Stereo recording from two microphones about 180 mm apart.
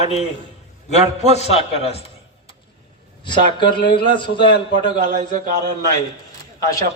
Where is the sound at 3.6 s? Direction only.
25° left (ahead or behind).